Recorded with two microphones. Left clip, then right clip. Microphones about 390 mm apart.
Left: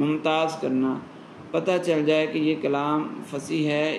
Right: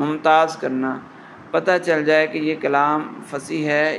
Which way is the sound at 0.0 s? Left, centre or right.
Right.